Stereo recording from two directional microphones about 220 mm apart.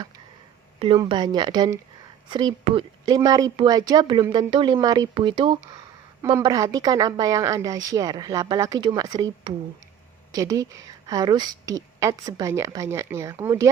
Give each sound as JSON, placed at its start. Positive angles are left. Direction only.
{"t": 0.8, "sound": "a woman's voice", "side_deg": -25}